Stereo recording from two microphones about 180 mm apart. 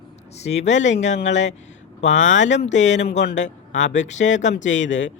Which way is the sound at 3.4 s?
45° left (ahead or behind).